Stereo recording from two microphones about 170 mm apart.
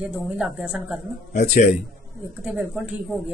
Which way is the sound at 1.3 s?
45° left (ahead or behind).